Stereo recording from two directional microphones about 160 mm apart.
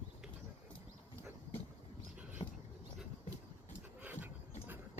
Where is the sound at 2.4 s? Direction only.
35° left (ahead or behind).